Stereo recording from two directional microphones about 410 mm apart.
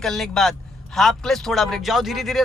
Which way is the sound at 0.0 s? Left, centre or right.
Centre.